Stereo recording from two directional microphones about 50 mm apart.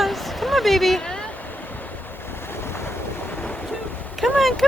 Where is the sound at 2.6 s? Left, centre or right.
Left.